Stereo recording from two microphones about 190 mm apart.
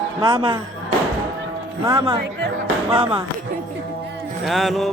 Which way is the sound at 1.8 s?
20° right (ahead or behind).